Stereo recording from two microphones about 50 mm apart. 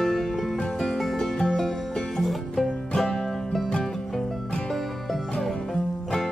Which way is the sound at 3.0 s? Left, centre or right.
Centre.